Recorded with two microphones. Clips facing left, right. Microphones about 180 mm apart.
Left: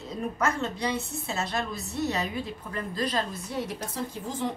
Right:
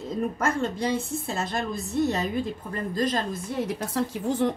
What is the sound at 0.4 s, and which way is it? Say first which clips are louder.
A woman's voice: even; 50° right (ahead or behind).